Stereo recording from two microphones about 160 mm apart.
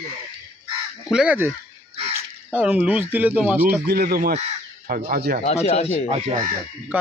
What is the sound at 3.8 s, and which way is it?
Speech, 80° right.